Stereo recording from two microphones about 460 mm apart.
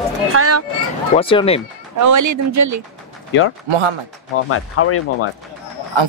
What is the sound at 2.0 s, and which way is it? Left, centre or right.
Speech, right.